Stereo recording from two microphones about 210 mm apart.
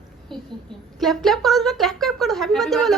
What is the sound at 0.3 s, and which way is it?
Speech, centre (ahead or behind).